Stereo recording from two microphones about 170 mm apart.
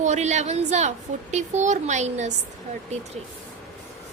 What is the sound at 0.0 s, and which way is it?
A woman's voice, 40° right (ahead or behind).